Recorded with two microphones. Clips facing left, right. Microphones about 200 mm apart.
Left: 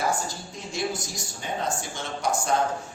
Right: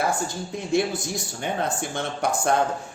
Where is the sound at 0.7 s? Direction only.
60° right (ahead or behind).